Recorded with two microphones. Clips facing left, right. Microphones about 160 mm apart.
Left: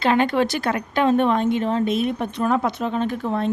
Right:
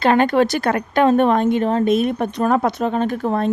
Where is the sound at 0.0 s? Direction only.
50° right (ahead or behind).